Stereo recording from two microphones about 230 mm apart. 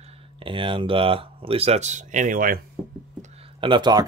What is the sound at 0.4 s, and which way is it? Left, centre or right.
Speech, right.